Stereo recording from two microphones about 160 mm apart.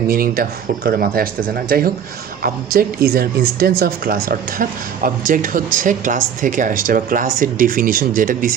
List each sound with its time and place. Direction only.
0.1 s speech: 70° right (ahead or behind)